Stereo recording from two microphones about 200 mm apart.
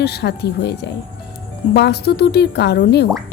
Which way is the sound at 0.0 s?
55° left (ahead or behind).